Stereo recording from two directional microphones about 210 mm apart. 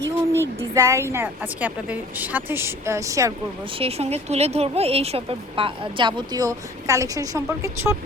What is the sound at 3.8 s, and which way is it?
A woman's voice, 30° right (ahead or behind).